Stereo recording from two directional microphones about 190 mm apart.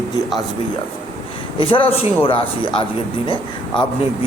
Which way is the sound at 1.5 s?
25° left (ahead or behind).